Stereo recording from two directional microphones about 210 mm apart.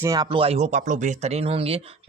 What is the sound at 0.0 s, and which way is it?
Speech, 20° right (ahead or behind).